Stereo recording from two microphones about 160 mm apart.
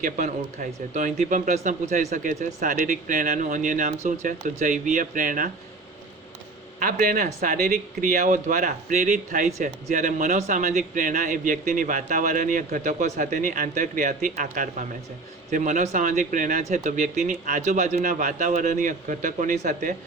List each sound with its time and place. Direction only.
0.0 s speech: 55° right (ahead or behind)
6.7 s a man's voice: 55° right (ahead or behind)